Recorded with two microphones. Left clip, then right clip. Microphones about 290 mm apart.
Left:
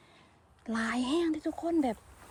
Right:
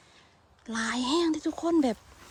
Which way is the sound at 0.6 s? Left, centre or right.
Centre.